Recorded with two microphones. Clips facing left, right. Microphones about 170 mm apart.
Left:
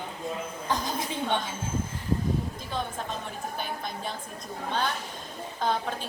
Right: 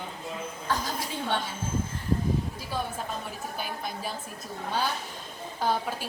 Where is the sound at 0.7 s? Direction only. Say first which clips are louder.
Left 1 dB; 20° left (ahead or behind).